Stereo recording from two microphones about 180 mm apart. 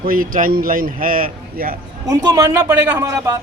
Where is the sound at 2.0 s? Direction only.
20° right (ahead or behind).